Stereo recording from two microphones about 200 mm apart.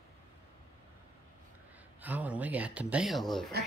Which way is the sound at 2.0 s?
10° right (ahead or behind).